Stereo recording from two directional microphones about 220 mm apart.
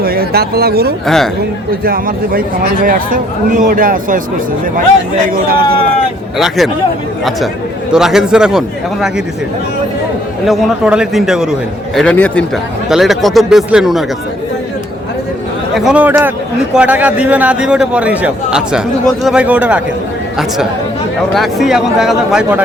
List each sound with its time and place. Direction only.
0.0 s speech: 45° right (ahead or behind)
1.0 s a man's voice: centre (ahead or behind)
1.8 s speech: 40° right (ahead or behind)
5.3 s speech: 40° right (ahead or behind)
6.3 s a man's voice: centre (ahead or behind)
7.9 s a man's voice: centre (ahead or behind)
10.4 s a man's voice: centre (ahead or behind)
15.7 s a man's voice: 5° right (ahead or behind)
21.3 s a man's voice: centre (ahead or behind)